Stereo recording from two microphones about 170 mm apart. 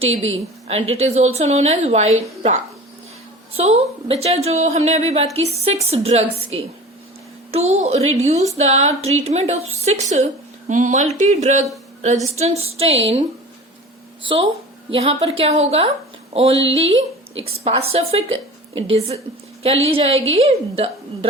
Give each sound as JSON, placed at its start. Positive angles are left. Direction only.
{"t": 0.0, "sound": "a woman's voice", "side_deg": -35}
{"t": 14.3, "sound": "a woman's voice", "side_deg": -30}